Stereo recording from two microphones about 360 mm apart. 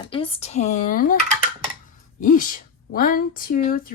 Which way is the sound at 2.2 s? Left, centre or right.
Left.